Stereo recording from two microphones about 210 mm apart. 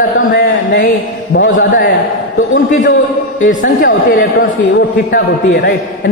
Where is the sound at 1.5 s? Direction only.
40° left (ahead or behind).